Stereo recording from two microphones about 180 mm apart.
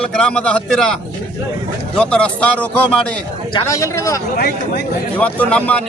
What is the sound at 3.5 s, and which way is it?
Speech, 15° left (ahead or behind).